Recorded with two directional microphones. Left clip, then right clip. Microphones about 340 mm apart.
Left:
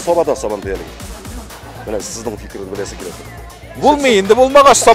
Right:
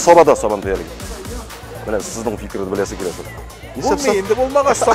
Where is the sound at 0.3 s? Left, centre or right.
Right.